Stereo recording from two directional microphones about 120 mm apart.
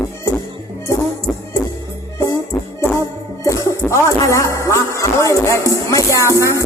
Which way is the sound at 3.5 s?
25° left (ahead or behind).